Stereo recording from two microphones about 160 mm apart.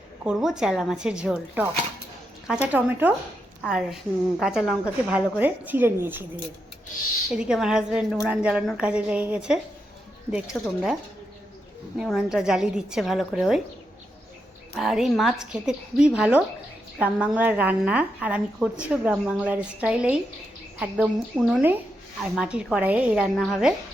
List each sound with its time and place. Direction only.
0.3 s a woman's voice: 5° right (ahead or behind)
5.4 s a woman's voice: 10° right (ahead or behind)
7.3 s a woman's voice: 5° right (ahead or behind)
12.0 s a woman's voice: centre (ahead or behind)
14.8 s a woman's voice: centre (ahead or behind)